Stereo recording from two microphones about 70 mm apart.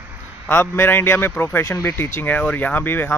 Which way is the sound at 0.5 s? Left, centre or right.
Left.